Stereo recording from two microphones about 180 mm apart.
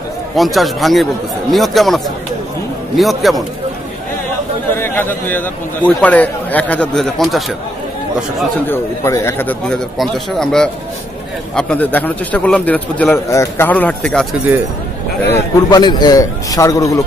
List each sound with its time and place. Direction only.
0.4 s speech: centre (ahead or behind)
3.0 s speech: centre (ahead or behind)
4.7 s a man's voice: 10° left (ahead or behind)
8.6 s a man's voice: 15° left (ahead or behind)
15.3 s a man's voice: 20° left (ahead or behind)